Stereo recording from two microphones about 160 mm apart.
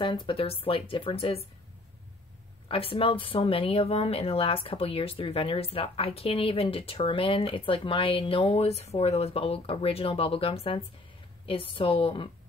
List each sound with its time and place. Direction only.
0.0 s speech: 30° left (ahead or behind)
2.7 s speech: 35° left (ahead or behind)